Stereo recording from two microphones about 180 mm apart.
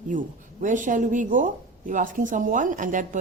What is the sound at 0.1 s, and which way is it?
Speech, 45° right (ahead or behind).